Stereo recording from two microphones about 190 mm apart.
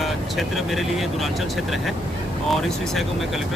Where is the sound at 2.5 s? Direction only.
Centre (ahead or behind).